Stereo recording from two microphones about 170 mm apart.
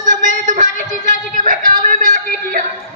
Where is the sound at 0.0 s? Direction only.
50° right (ahead or behind).